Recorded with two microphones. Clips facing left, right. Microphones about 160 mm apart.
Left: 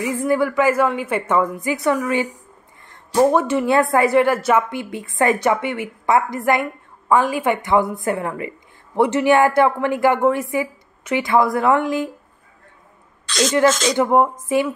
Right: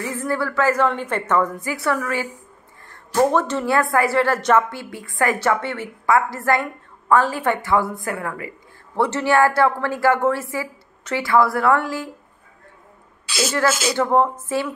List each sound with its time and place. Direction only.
0.0 s a woman's voice: 15° left (ahead or behind)
4.6 s a woman's voice: 20° left (ahead or behind)
13.3 s speech: 5° right (ahead or behind)
13.9 s a woman's voice: 10° left (ahead or behind)